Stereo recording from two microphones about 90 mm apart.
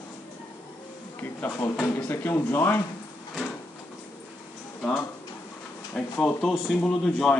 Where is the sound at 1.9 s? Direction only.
25° left (ahead or behind).